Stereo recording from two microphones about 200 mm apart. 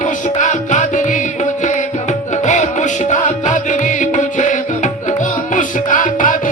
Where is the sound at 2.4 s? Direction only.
35° left (ahead or behind).